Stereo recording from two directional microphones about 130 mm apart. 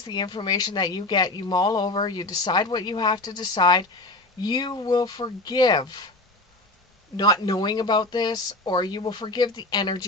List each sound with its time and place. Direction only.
0.0 s speech: 35° left (ahead or behind)
7.2 s speech: 30° left (ahead or behind)